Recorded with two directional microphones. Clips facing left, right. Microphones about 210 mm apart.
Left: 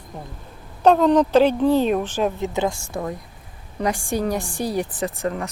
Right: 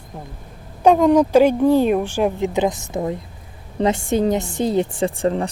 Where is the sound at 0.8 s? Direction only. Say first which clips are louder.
Right 2 dB; 10° right (ahead or behind).